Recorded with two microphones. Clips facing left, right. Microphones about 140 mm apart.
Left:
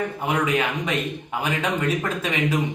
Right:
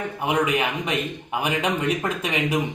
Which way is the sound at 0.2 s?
15° right (ahead or behind).